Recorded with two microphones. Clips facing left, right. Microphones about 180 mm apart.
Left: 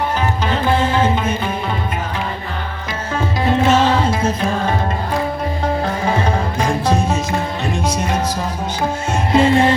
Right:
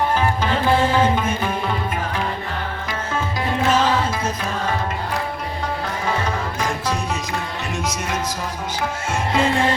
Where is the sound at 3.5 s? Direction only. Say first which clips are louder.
Left 4 dB; 25° left (ahead or behind).